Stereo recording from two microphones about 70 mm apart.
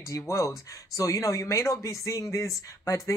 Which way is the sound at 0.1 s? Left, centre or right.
Left.